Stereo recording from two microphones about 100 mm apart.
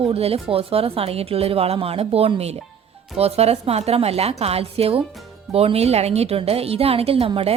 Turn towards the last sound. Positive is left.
turn(degrees=-70)  # may be behind; listen again after turning